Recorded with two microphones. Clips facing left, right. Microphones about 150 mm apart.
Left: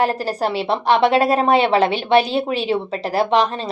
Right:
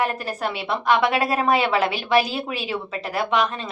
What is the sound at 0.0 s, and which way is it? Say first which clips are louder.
A woman's voice: left 5 dB; 30° left (ahead or behind).